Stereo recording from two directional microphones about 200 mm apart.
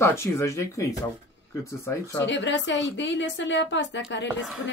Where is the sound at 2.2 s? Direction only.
65° left (ahead or behind).